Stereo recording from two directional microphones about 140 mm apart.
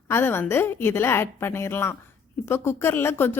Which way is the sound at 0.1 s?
15° left (ahead or behind).